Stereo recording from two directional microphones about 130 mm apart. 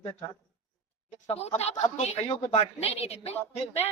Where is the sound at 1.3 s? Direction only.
55° left (ahead or behind).